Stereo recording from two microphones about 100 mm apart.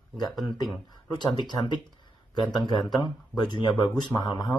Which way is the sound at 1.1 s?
50° left (ahead or behind).